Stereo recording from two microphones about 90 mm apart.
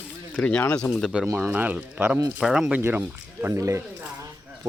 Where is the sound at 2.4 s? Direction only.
5° right (ahead or behind).